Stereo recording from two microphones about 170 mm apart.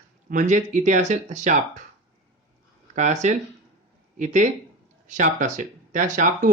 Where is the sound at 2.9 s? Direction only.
45° right (ahead or behind).